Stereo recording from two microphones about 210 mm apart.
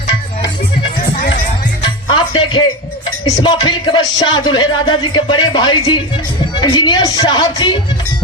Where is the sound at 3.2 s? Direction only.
20° left (ahead or behind).